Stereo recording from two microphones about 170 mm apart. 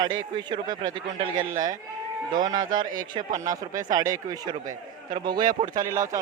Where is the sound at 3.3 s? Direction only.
20° right (ahead or behind).